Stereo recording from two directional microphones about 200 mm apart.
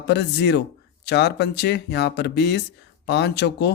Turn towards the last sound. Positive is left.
turn(degrees=60)  # may be behind; listen again after turning